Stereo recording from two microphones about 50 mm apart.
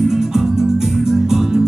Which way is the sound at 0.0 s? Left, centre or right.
Centre.